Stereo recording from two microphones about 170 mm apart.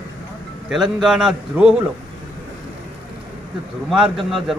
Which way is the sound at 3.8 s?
5° right (ahead or behind).